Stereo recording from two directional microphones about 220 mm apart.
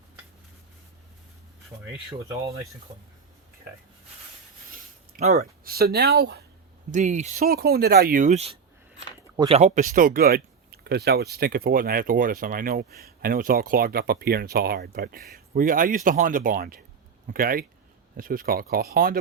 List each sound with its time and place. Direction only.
2.1 s speech: 15° right (ahead or behind)
5.1 s speech: 35° right (ahead or behind)
6.9 s speech: 35° right (ahead or behind)
9.3 s speech: 20° right (ahead or behind)
9.6 s speech: 35° right (ahead or behind)